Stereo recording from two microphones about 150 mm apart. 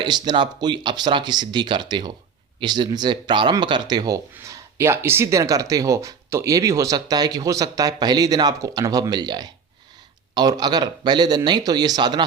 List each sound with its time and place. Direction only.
0.0 s speech: 30° right (ahead or behind)